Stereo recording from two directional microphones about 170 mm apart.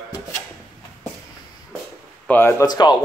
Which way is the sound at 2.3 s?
10° left (ahead or behind).